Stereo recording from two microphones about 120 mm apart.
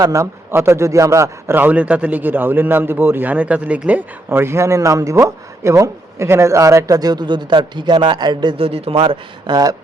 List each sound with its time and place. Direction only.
0.0 s a man's voice: 25° right (ahead or behind)
8.6 s a man's voice: 55° right (ahead or behind)
9.5 s speech: 35° right (ahead or behind)